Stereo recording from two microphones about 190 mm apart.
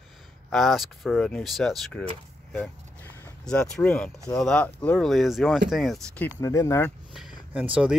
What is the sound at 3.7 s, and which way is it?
Speech, 5° left (ahead or behind).